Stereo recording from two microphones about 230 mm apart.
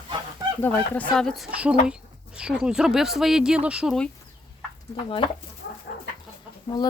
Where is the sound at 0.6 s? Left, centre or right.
Centre.